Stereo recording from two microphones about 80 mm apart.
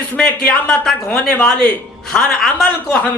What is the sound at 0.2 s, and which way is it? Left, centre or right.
Speech, centre.